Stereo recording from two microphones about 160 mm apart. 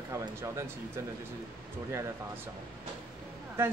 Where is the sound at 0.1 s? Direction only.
20° right (ahead or behind).